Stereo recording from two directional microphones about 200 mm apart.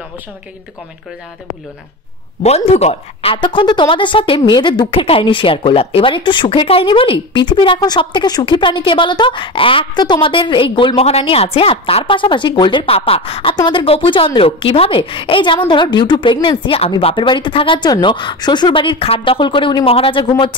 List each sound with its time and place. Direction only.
2.4 s speech: 30° left (ahead or behind)